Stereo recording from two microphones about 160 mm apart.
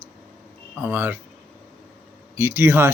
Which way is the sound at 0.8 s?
15° right (ahead or behind).